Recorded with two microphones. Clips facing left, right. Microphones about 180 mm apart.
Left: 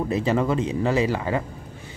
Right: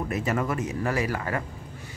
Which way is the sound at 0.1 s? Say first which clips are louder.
Left 5 dB; 30° left (ahead or behind).